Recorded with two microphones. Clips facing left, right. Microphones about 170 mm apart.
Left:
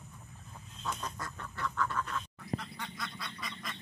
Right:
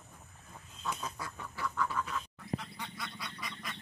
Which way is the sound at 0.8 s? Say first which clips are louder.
Even; 5° right (ahead or behind).